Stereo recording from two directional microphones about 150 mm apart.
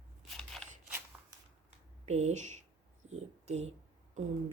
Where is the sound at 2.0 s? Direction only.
45° right (ahead or behind).